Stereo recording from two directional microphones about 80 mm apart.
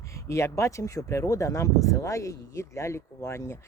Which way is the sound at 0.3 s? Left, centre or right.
Left.